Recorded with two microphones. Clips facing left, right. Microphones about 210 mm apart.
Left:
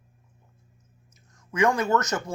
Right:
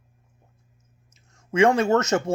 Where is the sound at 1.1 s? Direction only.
25° right (ahead or behind).